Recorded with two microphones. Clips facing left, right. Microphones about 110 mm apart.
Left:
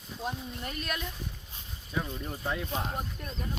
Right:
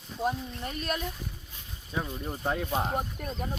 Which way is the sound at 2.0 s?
20° right (ahead or behind).